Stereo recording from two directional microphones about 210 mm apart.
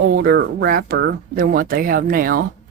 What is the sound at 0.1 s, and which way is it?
Speech, 50° right (ahead or behind).